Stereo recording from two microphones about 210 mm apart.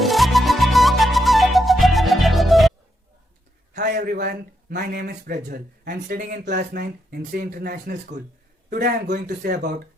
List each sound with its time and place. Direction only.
0.0 s flute: centre (ahead or behind)
3.8 s a man's voice: 40° right (ahead or behind)